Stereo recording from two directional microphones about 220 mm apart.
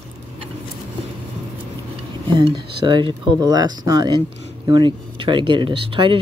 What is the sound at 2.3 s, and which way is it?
Speech, 20° right (ahead or behind).